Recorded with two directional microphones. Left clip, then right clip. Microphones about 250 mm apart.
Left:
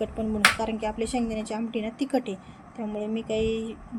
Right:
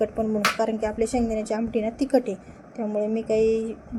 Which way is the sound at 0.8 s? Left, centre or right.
Centre.